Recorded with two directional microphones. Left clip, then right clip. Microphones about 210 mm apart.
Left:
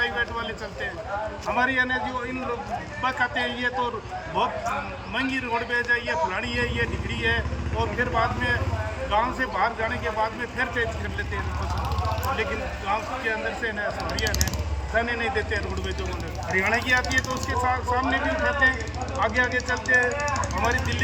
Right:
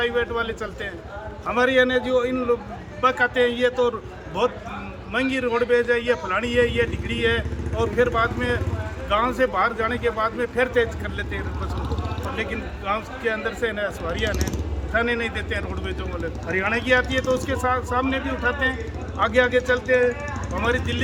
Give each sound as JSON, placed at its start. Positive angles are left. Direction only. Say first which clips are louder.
{"t": 0.0, "sound": "a man's voice", "louder": "right 3 dB", "side_deg": -25}
{"t": 1.5, "sound": "a man's voice", "louder": "right 5 dB", "side_deg": -25}
{"t": 3.0, "sound": "a man's voice", "louder": "right 6 dB", "side_deg": -25}
{"t": 5.1, "sound": "a man's voice", "louder": "right 4 dB", "side_deg": -25}
{"t": 12.9, "sound": "a man's voice", "louder": "right 2 dB", "side_deg": -25}
{"t": 20.1, "sound": "a sound", "louder": "left 6 dB", "side_deg": -40}
{"t": 20.5, "sound": "a man's voice", "louder": "right 1 dB", "side_deg": -20}